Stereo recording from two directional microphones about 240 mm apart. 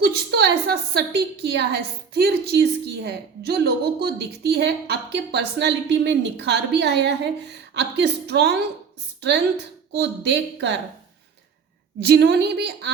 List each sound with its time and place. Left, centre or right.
0.0 s a woman's voice: right
11.9 s a woman's voice: right